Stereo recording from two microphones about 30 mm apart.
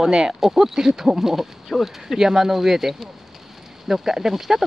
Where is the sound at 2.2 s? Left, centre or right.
Centre.